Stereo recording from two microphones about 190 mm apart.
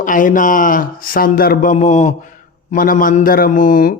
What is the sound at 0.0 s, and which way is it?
A man's voice, 45° left (ahead or behind).